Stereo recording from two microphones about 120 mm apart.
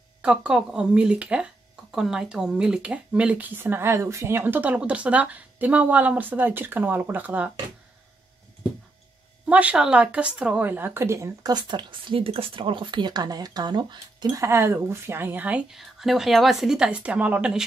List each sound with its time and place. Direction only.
0.2 s speech: 10° right (ahead or behind)
9.5 s speech: 10° right (ahead or behind); by 14.4 s 40° right (ahead or behind)
14.4 s speech: 20° right (ahead or behind)
15.7 s a woman's voice: centre (ahead or behind)